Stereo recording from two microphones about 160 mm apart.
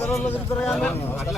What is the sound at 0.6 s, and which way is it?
Speech, centre (ahead or behind).